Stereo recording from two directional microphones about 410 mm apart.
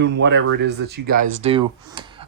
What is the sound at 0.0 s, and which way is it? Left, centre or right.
Speech, right.